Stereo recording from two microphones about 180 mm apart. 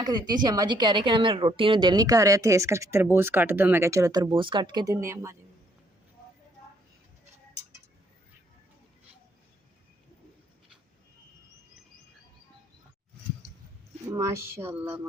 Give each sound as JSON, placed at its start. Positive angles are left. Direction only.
{"t": 0.0, "sound": "a woman's voice", "side_deg": -25}
{"t": 14.1, "sound": "speech", "side_deg": -15}